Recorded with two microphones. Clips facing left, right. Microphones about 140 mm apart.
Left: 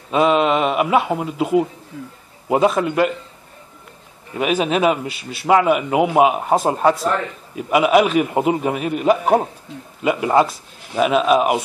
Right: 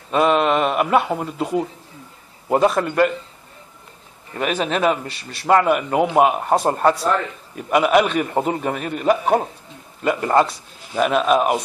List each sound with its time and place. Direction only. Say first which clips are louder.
0.1 s a man's voice: left 1 dB; centre (ahead or behind)
1.9 s a sound: left 9 dB; 90° left
2.5 s speech: left 1 dB; 5° left (ahead or behind)
4.3 s a man's voice: left 3 dB; 5° left (ahead or behind)